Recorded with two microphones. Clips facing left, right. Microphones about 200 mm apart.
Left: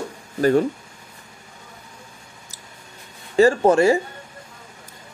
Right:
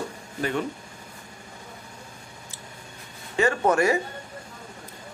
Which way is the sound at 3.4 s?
30° left (ahead or behind).